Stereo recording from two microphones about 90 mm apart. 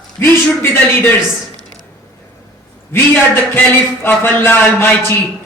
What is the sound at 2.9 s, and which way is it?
A man's voice, 25° left (ahead or behind).